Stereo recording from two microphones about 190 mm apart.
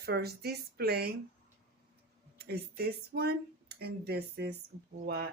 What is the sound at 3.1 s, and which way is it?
Speech, 55° right (ahead or behind).